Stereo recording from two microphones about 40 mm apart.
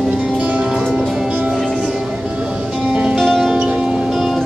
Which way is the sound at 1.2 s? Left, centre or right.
Right.